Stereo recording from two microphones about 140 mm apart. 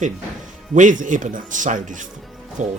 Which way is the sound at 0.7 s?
65° right (ahead or behind).